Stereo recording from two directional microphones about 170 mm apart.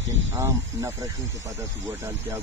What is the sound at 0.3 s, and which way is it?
Speech, 15° right (ahead or behind).